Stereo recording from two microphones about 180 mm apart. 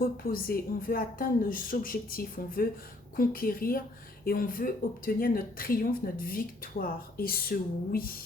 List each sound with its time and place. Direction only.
0.0 s speech: 55° left (ahead or behind)